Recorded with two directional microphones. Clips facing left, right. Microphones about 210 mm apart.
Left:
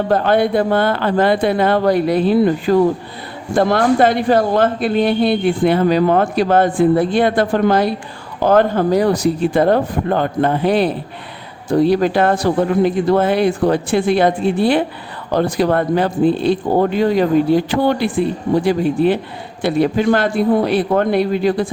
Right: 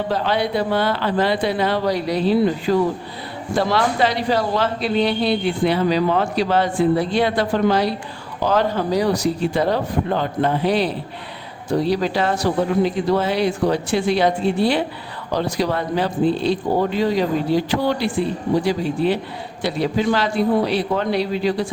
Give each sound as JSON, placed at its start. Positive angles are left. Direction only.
{"t": 0.1, "sound": "speech", "side_deg": 50}